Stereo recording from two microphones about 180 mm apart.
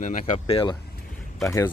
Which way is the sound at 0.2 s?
35° left (ahead or behind).